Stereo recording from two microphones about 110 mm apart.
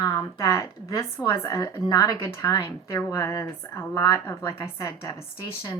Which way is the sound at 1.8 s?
35° left (ahead or behind).